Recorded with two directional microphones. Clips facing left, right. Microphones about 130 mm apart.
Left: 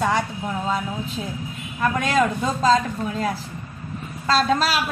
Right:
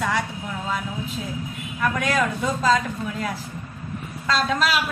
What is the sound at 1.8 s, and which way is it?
A woman's voice, 25° left (ahead or behind).